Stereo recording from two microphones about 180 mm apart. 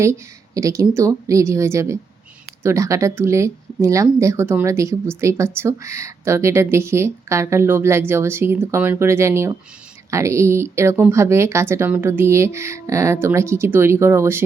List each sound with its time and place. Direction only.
0.0 s speech: 15° right (ahead or behind)